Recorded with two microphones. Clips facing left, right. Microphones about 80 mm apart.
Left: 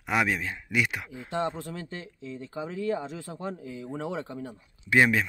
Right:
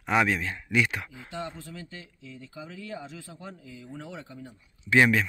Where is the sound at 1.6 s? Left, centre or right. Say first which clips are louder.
Left 5 dB; left.